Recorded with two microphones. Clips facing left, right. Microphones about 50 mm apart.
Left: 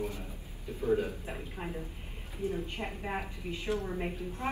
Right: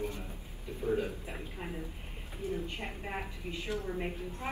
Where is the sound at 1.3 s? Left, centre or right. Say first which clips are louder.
Left 2 dB; centre.